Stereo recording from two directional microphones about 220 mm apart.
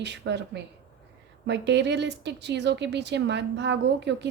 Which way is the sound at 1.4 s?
50° right (ahead or behind).